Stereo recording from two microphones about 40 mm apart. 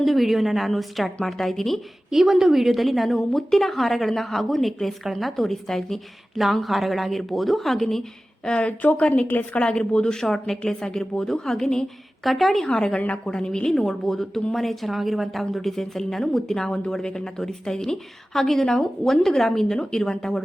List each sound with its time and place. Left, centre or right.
0.0 s a woman's voice: centre
2.0 s a woman's voice: centre
8.4 s a woman's voice: left
8.8 s a woman's voice: left
10.2 s a woman's voice: centre
12.2 s a woman's voice: centre
12.6 s a woman's voice: centre
13.7 s a woman's voice: centre
16.6 s a woman's voice: centre